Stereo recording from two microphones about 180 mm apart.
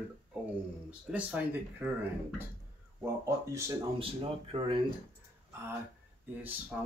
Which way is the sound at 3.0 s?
15° right (ahead or behind).